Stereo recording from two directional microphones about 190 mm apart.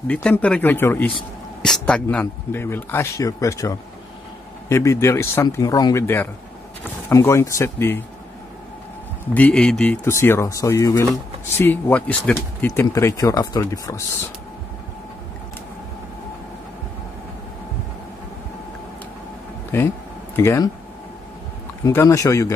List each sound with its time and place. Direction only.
0.1 s speech: 5° left (ahead or behind)
9.3 s speech: 5° left (ahead or behind)
19.7 s speech: 10° left (ahead or behind)
21.8 s speech: 15° left (ahead or behind)